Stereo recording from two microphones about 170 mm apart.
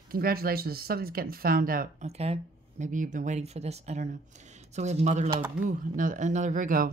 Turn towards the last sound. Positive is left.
turn(degrees=-50)  # may be behind; listen again after turning